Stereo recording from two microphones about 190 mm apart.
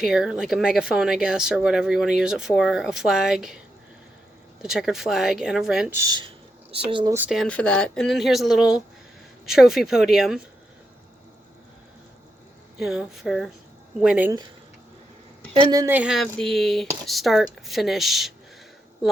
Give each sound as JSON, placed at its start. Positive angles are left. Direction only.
{"t": 0.0, "sound": "speech", "side_deg": -5}
{"t": 4.6, "sound": "speech", "side_deg": 0}
{"t": 6.0, "sound": "speech", "side_deg": -20}
{"t": 7.1, "sound": "speech", "side_deg": -5}
{"t": 12.8, "sound": "speech", "side_deg": 0}
{"t": 15.5, "sound": "a woman's voice", "side_deg": -25}
{"t": 16.0, "sound": "speech", "side_deg": 0}